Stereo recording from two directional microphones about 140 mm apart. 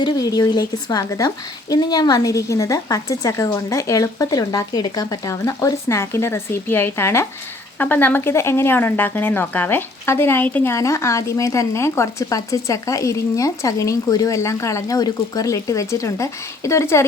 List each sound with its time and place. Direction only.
0.0 s speech: 30° left (ahead or behind)